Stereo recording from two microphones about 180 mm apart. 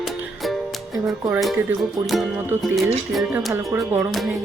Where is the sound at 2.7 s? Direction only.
Centre (ahead or behind).